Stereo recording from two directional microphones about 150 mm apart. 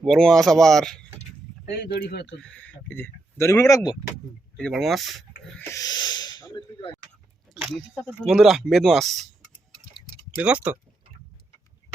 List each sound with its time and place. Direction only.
0.0 s speech: centre (ahead or behind)
1.6 s speech: 90° left
2.2 s speech: 5° left (ahead or behind); by 3.9 s 20° left (ahead or behind)
4.5 s speech: centre (ahead or behind)
5.7 s snort: 25° left (ahead or behind)
7.5 s a sound: centre (ahead or behind)
8.0 s speech: centre (ahead or behind)
10.4 s speech: 10° right (ahead or behind)